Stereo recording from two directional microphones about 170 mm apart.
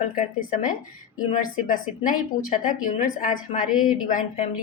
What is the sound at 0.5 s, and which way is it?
A woman's voice, 50° left (ahead or behind).